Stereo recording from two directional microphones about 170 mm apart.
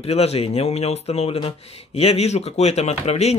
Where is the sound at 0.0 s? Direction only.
35° left (ahead or behind).